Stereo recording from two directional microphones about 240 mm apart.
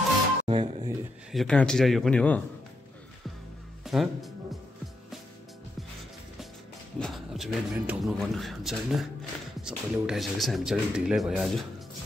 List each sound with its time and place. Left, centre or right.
0.5 s speech: right
1.3 s a man's voice: centre
3.8 s speech: centre
7.0 s a man's voice: centre